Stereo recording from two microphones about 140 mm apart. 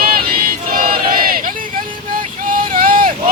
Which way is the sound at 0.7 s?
90° right.